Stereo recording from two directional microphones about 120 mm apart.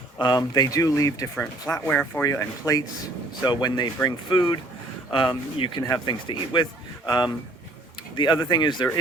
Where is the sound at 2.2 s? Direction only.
30° left (ahead or behind).